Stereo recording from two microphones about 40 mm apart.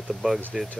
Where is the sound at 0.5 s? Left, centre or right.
Centre.